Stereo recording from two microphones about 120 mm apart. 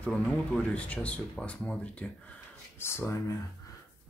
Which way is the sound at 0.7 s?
10° left (ahead or behind).